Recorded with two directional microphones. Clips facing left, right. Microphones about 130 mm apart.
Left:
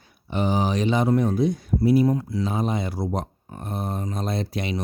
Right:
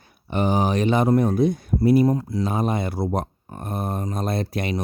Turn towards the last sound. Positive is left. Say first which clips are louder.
# right 2 dB
turn(degrees=-55)  # may be behind; listen again after turning